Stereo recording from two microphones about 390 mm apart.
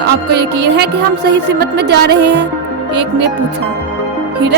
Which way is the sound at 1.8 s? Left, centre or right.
Right.